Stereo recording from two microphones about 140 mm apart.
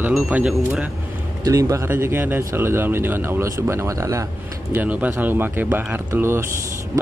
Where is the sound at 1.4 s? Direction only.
20° right (ahead or behind).